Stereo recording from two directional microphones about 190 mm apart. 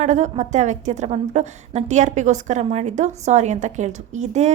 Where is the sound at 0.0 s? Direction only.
40° right (ahead or behind).